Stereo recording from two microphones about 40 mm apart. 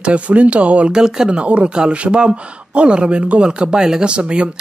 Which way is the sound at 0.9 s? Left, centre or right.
Centre.